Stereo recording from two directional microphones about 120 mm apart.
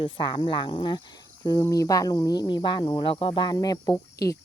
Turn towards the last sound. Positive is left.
turn(degrees=30)  # may be behind; listen again after turning